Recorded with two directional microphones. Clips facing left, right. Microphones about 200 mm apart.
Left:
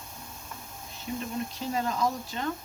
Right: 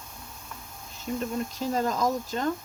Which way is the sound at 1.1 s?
45° right (ahead or behind).